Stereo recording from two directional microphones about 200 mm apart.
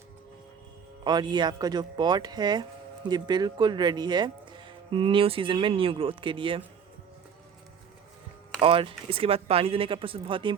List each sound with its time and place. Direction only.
1.0 s speech: 20° right (ahead or behind)
8.6 s speech: 25° right (ahead or behind)